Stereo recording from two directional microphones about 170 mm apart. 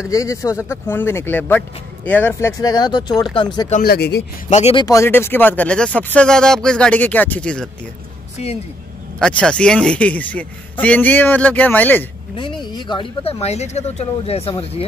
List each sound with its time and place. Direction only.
0.1 s speech: 20° left (ahead or behind)
2.6 s speech: 25° left (ahead or behind)
3.8 s speech: 70° left (ahead or behind)
4.5 s speech: 40° left (ahead or behind)
4.7 s speech: 20° left (ahead or behind)
8.4 s speech: 40° left (ahead or behind)
9.2 s speech: 5° left (ahead or behind)
12.4 s speech: 25° left (ahead or behind)